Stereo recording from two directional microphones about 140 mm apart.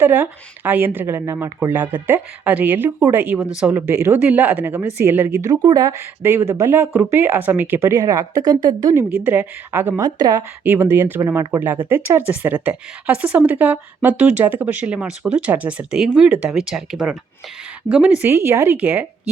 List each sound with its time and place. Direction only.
0.0 s a woman's voice: 15° right (ahead or behind)
9.2 s a woman's voice: 15° right (ahead or behind)
10.0 s speech: 25° right (ahead or behind)
10.6 s a woman's voice: 15° right (ahead or behind)